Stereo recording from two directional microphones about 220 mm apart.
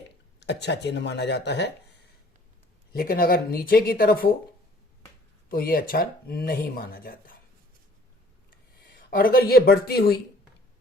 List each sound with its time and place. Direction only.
0.3 s speech: 50° left (ahead or behind)
5.5 s speech: 40° left (ahead or behind)
9.0 s speech: 40° left (ahead or behind)